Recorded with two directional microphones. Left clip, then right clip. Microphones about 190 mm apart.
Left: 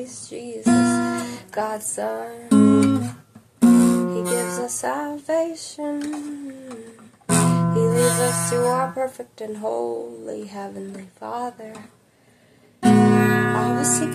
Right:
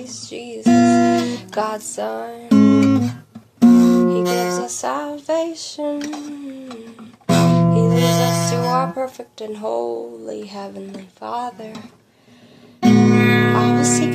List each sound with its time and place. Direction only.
0.0 s female singing: 5° left (ahead or behind)
0.7 s guitar: 45° right (ahead or behind)
1.5 s female singing: 5° left (ahead or behind)
2.5 s guitar: 40° right (ahead or behind)
3.6 s music: 45° right (ahead or behind)
4.6 s female singing: 5° left (ahead or behind)
7.2 s music: 45° right (ahead or behind)
8.9 s speech: 5° left (ahead or behind)
11.1 s female singing: 5° left (ahead or behind)
12.8 s guitar: 45° right (ahead or behind)
13.7 s music: 40° right (ahead or behind)